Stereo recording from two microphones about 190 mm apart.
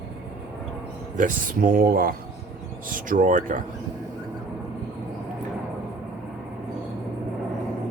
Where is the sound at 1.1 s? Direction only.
45° right (ahead or behind).